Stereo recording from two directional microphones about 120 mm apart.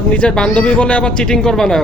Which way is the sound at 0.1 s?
5° left (ahead or behind).